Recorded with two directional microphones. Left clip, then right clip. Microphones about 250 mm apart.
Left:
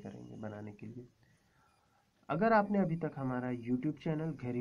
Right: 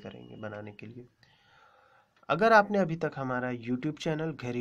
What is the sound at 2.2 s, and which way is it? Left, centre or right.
Speech, right.